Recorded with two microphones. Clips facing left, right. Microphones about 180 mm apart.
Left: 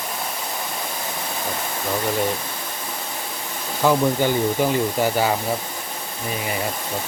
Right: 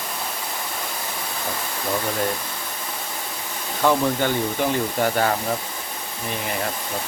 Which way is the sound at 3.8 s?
10° left (ahead or behind).